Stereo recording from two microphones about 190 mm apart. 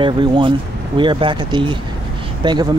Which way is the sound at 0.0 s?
25° right (ahead or behind).